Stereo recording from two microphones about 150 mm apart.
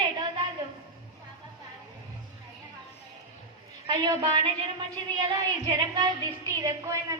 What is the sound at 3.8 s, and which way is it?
A woman's voice, 30° right (ahead or behind).